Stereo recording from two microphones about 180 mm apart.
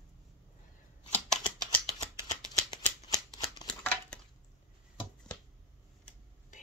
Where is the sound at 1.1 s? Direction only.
5° left (ahead or behind).